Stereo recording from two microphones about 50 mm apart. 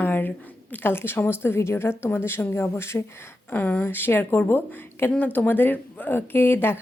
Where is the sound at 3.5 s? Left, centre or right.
Left.